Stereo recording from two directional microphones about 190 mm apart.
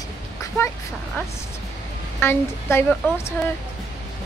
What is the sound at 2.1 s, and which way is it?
Speech, 10° left (ahead or behind).